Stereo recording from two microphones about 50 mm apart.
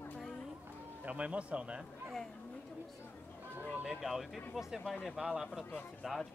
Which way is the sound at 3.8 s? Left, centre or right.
Centre.